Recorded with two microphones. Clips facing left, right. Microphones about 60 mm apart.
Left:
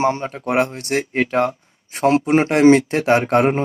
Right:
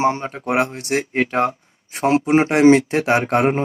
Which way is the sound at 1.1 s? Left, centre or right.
Right.